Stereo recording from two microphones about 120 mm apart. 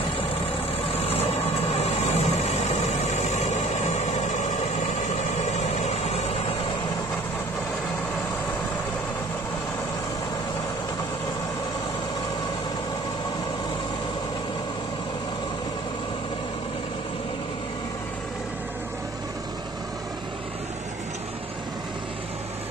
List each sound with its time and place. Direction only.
0.9 s vehicle: 60° left (ahead or behind)